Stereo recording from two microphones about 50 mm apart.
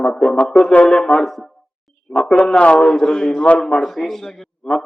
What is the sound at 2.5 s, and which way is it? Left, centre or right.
Speech, left.